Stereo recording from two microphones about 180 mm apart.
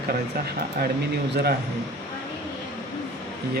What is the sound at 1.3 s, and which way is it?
Speech, 65° right (ahead or behind).